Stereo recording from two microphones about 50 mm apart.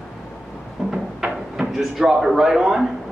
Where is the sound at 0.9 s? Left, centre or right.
Centre.